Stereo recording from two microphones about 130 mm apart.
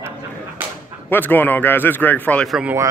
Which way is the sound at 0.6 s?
15° right (ahead or behind).